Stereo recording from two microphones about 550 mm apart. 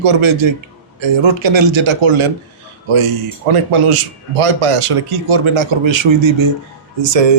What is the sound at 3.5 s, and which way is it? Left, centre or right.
A man's voice, right.